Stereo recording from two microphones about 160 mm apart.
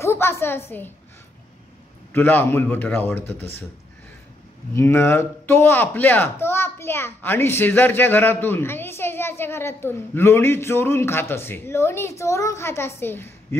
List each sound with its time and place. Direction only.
0.0 s a woman's voice: 15° left (ahead or behind)
2.1 s speech: 10° left (ahead or behind)
4.7 s speech: 15° left (ahead or behind)